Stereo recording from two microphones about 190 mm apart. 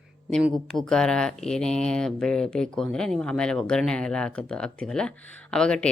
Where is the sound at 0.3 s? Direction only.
Centre (ahead or behind).